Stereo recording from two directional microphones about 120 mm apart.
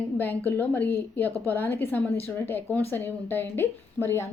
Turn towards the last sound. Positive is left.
turn(degrees=20)  # may be behind; listen again after turning